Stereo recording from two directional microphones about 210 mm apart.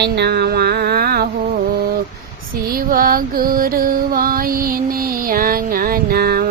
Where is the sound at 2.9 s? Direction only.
45° right (ahead or behind).